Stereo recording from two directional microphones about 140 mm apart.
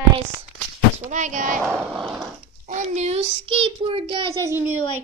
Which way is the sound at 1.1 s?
60° right (ahead or behind).